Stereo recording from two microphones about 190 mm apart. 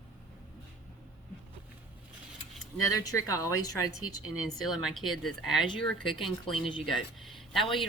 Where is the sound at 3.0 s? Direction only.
20° left (ahead or behind).